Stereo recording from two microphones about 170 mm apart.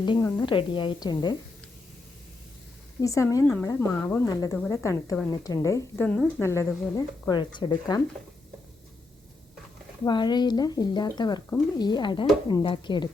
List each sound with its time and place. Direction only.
0.2 s a woman's voice: 15° left (ahead or behind)
0.4 s speech: 30° left (ahead or behind)
3.0 s a woman's voice: 20° left (ahead or behind)
6.1 s a woman's voice: 5° left (ahead or behind)
6.9 s speech: 25° left (ahead or behind)
10.0 s speech: 25° left (ahead or behind)